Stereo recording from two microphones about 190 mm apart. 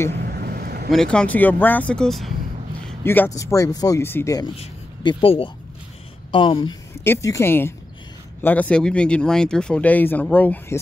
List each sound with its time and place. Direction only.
0.1 s vehicle: 55° right (ahead or behind)
0.8 s speech: 5° left (ahead or behind)
3.0 s speech: 10° left (ahead or behind)
4.6 s speech: 30° left (ahead or behind); by 10.8 s 10° left (ahead or behind)